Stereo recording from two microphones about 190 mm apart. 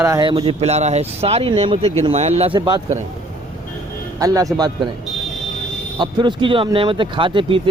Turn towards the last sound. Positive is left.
turn(degrees=-25)  # may be behind; listen again after turning